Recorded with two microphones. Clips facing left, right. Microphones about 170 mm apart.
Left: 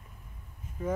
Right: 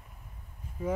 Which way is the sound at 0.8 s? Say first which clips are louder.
Even; 10° right (ahead or behind).